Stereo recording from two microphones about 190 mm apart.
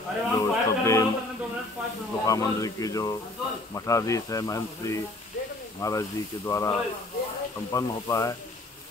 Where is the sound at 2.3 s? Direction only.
15° left (ahead or behind).